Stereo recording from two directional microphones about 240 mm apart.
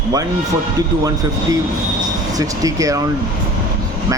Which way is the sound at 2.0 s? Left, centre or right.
Centre.